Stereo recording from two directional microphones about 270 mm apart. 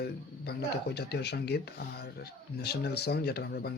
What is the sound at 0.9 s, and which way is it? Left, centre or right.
Speech, left.